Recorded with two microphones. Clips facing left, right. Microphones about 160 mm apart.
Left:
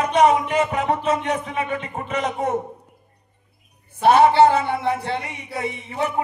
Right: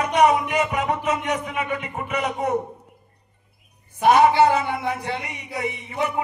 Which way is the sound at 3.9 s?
15° right (ahead or behind).